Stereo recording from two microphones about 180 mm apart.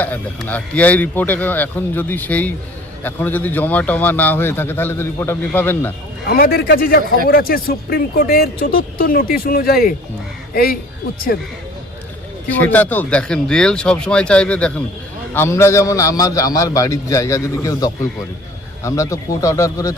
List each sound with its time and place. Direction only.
0.0 s a man's voice: 10° left (ahead or behind)
6.2 s speech: 55° left (ahead or behind)
12.5 s a man's voice: 10° left (ahead or behind)